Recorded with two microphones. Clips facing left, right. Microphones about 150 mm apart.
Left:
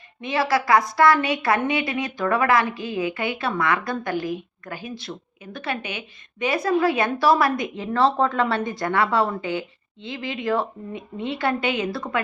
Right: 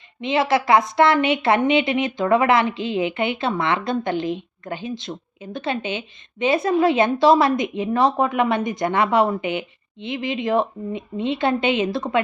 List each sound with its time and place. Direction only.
0.2 s a woman's voice: 20° right (ahead or behind)